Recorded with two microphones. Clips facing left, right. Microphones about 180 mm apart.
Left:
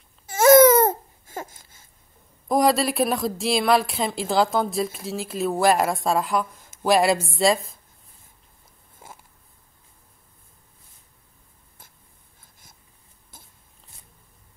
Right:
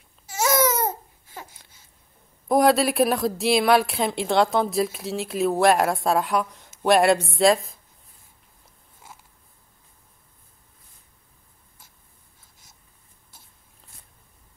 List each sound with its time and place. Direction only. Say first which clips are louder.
0.3 s babbling: left 10 dB; 55° left (ahead or behind)
2.4 s speech: right 2 dB; centre (ahead or behind)